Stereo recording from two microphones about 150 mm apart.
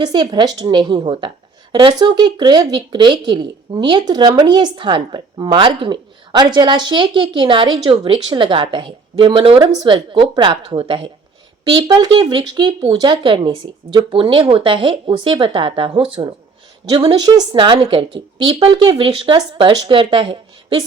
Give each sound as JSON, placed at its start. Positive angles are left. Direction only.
{"t": 0.0, "sound": "speech", "side_deg": -30}